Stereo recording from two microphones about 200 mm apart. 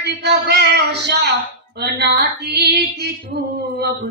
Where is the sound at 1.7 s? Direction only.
55° right (ahead or behind).